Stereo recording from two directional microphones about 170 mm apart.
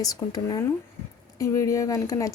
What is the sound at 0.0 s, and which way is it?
Speech, 20° left (ahead or behind).